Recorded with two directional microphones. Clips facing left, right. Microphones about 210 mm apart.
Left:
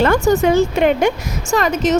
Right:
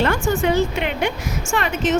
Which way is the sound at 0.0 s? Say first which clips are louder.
Left 6 dB; 45° left (ahead or behind).